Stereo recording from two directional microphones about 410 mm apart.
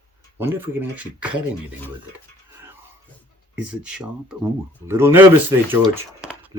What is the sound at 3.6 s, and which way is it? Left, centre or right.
Speech, centre.